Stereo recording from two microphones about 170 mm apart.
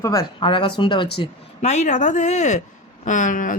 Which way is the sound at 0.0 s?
20° left (ahead or behind).